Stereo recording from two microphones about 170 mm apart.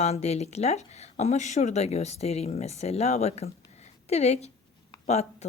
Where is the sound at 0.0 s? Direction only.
40° left (ahead or behind).